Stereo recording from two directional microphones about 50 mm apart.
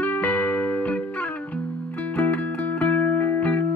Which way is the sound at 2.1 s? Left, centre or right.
Left.